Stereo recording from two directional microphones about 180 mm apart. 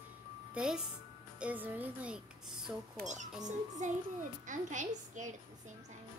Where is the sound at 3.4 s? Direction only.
45° right (ahead or behind).